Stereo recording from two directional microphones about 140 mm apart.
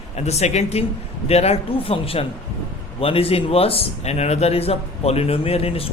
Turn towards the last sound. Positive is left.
turn(degrees=45)  # may be behind; listen again after turning